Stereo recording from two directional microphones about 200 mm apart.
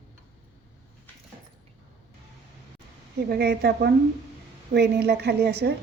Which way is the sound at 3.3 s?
55° right (ahead or behind).